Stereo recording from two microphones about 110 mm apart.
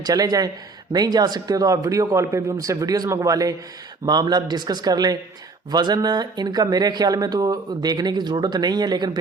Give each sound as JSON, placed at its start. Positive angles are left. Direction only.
{"t": 0.0, "sound": "speech", "side_deg": -35}